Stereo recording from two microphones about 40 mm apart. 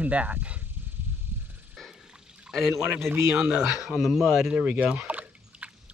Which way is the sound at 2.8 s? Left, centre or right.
Right.